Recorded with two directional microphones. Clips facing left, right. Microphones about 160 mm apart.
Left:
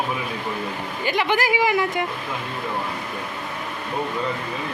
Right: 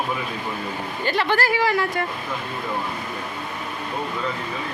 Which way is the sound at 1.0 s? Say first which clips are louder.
Even; 15° left (ahead or behind).